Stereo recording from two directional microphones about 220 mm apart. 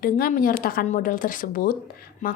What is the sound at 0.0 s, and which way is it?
A woman's voice, 40° left (ahead or behind).